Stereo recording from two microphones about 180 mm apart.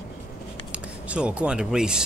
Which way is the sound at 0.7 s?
5° right (ahead or behind).